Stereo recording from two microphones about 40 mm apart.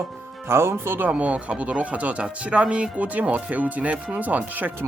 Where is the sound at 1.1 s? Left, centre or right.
Right.